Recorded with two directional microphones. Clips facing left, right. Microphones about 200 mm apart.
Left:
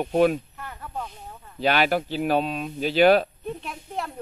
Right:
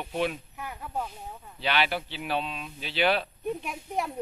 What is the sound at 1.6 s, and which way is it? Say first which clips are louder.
Speech: left 7 dB; 45° left (ahead or behind).